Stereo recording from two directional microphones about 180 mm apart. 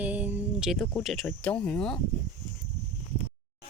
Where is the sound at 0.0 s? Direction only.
10° right (ahead or behind).